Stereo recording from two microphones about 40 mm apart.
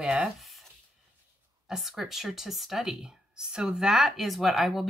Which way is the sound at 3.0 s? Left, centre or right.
Centre.